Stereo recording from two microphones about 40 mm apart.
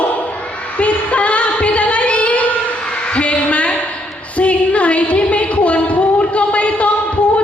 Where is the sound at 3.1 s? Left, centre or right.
Left.